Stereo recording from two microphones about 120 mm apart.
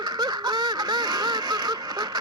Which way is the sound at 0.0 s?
35° right (ahead or behind).